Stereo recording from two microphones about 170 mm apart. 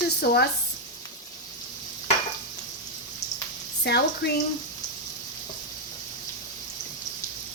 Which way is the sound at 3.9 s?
75° left (ahead or behind).